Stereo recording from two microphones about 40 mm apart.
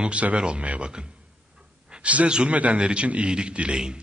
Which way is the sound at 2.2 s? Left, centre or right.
Right.